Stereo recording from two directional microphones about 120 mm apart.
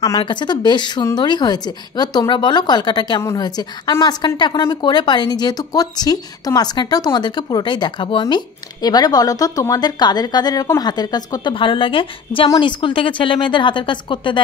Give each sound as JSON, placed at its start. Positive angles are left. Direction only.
{"t": 0.2, "sound": "a woman's voice", "side_deg": 40}